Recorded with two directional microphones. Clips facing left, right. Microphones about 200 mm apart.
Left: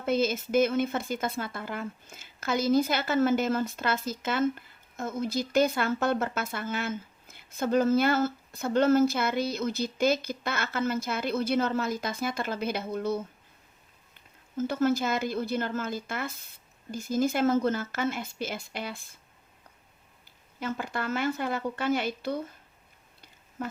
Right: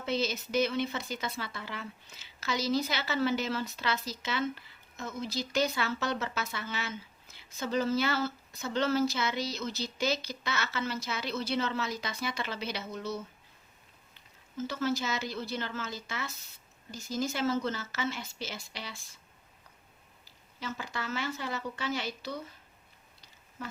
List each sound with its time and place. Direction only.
0.0 s speech: 50° left (ahead or behind)
20.6 s speech: 55° left (ahead or behind)